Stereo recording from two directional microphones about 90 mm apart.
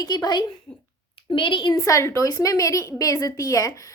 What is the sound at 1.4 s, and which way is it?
Speech, 65° left (ahead or behind).